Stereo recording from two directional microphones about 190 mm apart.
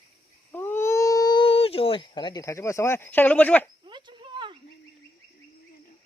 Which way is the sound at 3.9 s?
25° right (ahead or behind).